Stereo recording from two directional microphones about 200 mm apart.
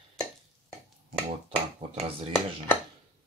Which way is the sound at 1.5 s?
30° right (ahead or behind).